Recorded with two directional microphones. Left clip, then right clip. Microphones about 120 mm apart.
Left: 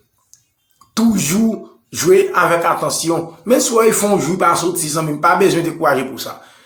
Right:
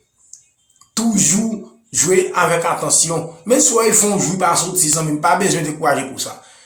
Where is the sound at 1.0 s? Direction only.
30° left (ahead or behind).